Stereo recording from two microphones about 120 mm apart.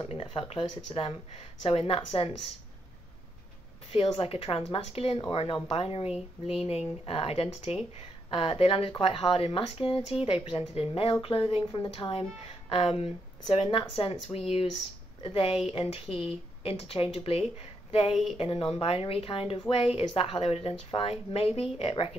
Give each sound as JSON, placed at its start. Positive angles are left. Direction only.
{"t": 0.0, "sound": "speech", "side_deg": 45}
{"t": 3.9, "sound": "speech", "side_deg": 55}